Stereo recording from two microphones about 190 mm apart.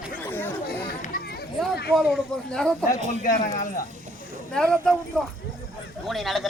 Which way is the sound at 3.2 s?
45° left (ahead or behind).